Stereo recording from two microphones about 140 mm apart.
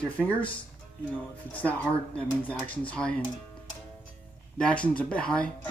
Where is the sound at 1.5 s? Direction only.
10° left (ahead or behind).